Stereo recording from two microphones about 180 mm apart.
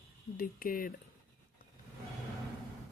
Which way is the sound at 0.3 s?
50° left (ahead or behind).